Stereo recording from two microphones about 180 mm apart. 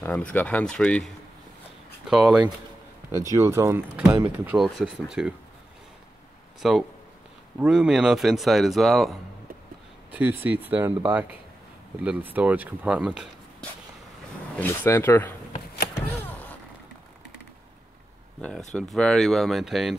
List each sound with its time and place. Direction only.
0.0 s speech: 10° left (ahead or behind)
3.2 s speech: 15° right (ahead or behind)
6.6 s speech: centre (ahead or behind)
10.1 s speech: 10° right (ahead or behind)
12.0 s speech: 10° right (ahead or behind)
14.6 s speech: 10° left (ahead or behind)
16.1 s a sound: 10° left (ahead or behind)
18.7 s speech: 5° left (ahead or behind)